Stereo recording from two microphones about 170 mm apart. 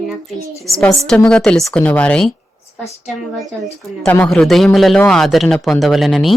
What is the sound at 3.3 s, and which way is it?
A man's voice, centre (ahead or behind).